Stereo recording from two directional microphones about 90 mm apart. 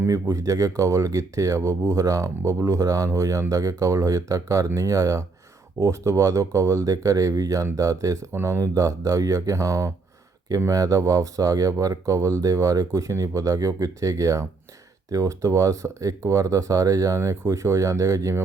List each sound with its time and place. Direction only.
0.1 s speech: 40° right (ahead or behind)